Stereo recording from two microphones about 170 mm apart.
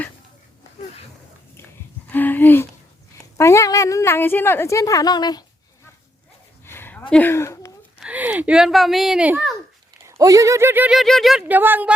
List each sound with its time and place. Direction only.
2.0 s a sound: 10° left (ahead or behind)
3.3 s a woman's voice: 15° left (ahead or behind)
6.7 s a sound: 15° left (ahead or behind)
7.1 s speech: 10° left (ahead or behind)
7.9 s a child's voice: 5° right (ahead or behind)
10.1 s speech: 20° right (ahead or behind)